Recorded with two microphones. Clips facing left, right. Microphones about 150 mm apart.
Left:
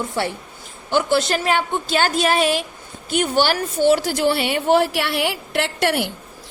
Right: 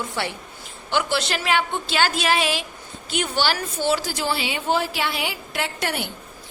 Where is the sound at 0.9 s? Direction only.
50° left (ahead or behind); by 6.1 s 75° left (ahead or behind).